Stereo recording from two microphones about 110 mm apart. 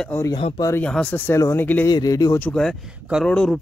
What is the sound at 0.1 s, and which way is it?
Speech, 20° left (ahead or behind).